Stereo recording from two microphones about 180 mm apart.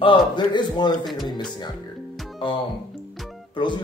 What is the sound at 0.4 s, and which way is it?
Speech, 25° left (ahead or behind).